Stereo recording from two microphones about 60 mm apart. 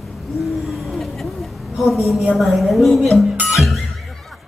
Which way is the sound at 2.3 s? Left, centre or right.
Centre.